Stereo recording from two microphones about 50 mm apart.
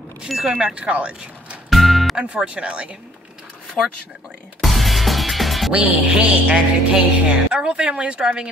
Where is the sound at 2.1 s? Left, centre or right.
Right.